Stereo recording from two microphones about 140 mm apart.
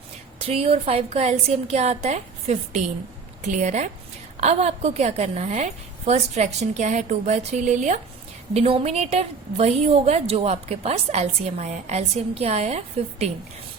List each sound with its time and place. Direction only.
0.4 s a woman's voice: 45° right (ahead or behind)